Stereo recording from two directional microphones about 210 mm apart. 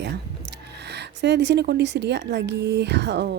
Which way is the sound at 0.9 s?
55° right (ahead or behind).